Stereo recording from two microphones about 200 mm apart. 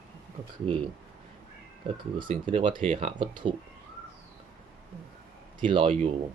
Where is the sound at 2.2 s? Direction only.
25° right (ahead or behind).